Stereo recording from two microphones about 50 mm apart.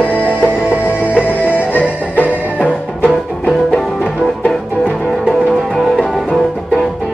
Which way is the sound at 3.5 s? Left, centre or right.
Centre.